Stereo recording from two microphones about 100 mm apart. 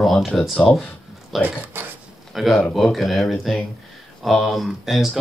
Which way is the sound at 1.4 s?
20° right (ahead or behind).